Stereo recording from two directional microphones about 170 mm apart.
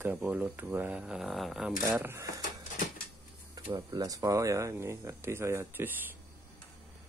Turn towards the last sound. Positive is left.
turn(degrees=-15)  # may be behind; listen again after turning